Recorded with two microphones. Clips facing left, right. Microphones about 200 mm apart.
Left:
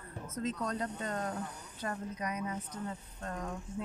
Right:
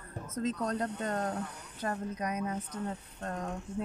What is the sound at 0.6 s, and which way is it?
Speech, 45° right (ahead or behind).